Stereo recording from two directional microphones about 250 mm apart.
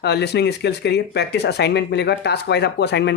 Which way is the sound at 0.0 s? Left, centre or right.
Left.